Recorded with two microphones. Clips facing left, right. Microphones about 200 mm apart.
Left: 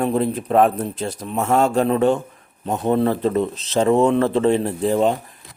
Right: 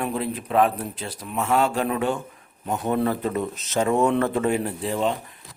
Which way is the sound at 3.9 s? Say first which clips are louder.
Left 5 dB; 20° left (ahead or behind).